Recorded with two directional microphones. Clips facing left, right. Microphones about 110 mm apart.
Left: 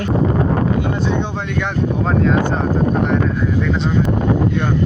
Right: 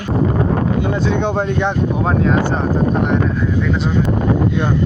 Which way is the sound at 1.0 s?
65° right (ahead or behind).